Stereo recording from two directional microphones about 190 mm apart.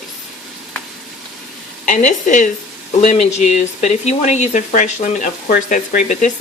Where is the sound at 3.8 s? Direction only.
35° left (ahead or behind).